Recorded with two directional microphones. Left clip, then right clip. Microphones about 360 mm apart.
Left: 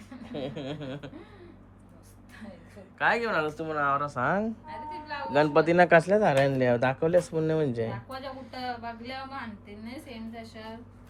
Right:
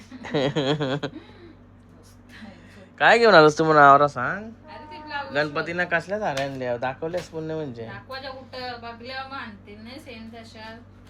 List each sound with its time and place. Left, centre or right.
0.3 s speech: centre
3.0 s speech: centre